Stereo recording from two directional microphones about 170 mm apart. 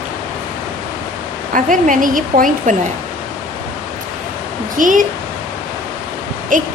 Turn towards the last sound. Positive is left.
turn(degrees=-50)  # may be behind; listen again after turning